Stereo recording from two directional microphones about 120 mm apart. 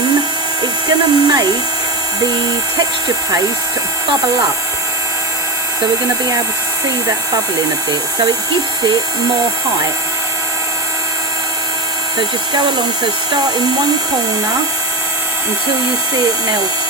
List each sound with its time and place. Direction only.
0.9 s speech: 35° right (ahead or behind)